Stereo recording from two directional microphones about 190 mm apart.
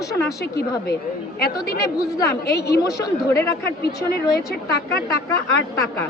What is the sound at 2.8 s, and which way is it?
Speech, 15° left (ahead or behind).